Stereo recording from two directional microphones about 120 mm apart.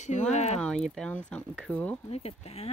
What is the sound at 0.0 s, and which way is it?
Speech, 75° left (ahead or behind).